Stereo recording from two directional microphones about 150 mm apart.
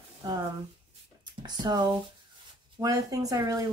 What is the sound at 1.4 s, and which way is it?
Speech, 30° right (ahead or behind).